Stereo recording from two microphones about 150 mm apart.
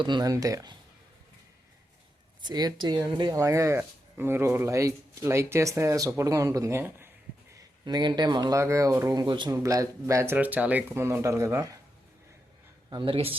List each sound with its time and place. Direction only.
0.0 s speech: 30° right (ahead or behind)
2.4 s speech: 25° right (ahead or behind)
7.5 s speech: 25° right (ahead or behind)
9.6 s speech: 20° right (ahead or behind)
12.9 s speech: 35° right (ahead or behind)